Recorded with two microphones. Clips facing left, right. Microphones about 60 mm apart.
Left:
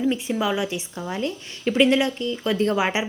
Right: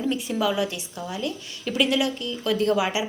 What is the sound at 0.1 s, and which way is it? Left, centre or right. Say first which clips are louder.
A woman's voice: left 1 dB; left.